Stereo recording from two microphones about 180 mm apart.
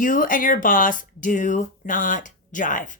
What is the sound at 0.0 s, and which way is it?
Speech, 50° left (ahead or behind).